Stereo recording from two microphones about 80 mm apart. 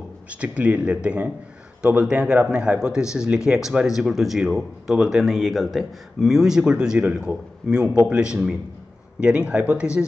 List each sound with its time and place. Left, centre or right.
0.3 s speech: centre